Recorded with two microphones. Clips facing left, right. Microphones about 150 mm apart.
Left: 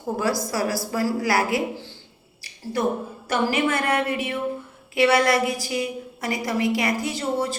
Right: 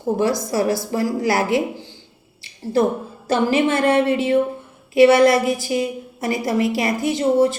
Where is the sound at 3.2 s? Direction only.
25° right (ahead or behind).